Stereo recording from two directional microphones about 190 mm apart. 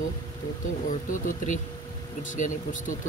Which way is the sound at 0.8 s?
45° left (ahead or behind).